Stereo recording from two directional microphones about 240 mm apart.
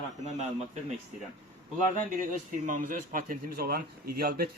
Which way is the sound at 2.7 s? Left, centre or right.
Right.